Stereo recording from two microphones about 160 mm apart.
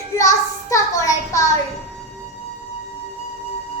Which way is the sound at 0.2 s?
20° left (ahead or behind).